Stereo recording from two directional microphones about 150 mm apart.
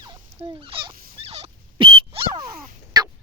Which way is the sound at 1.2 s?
45° right (ahead or behind).